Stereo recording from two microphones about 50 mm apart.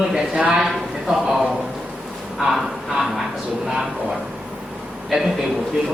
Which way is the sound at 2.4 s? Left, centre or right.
Right.